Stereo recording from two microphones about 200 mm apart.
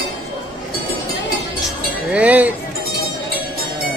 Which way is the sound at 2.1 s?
5° right (ahead or behind).